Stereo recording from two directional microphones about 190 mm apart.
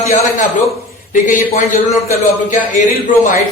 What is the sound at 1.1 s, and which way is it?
A man's voice, 45° left (ahead or behind).